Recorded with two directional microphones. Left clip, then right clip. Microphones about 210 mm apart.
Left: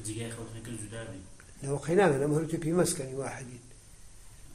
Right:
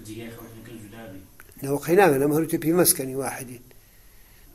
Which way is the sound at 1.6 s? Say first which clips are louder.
Right 7 dB; 40° right (ahead or behind).